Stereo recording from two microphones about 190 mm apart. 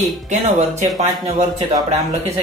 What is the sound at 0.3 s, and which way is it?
Speech, 35° right (ahead or behind).